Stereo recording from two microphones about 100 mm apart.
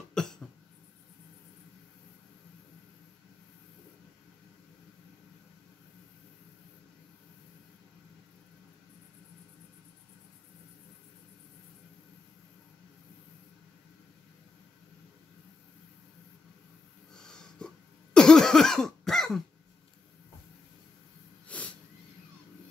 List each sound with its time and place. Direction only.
0.1 s cough: 5° left (ahead or behind)
17.1 s snort: 5° left (ahead or behind)
18.1 s cough: 5° left (ahead or behind)
21.5 s wheeze: 15° left (ahead or behind)